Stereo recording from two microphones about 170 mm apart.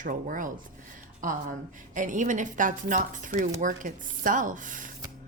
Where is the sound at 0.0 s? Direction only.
55° right (ahead or behind).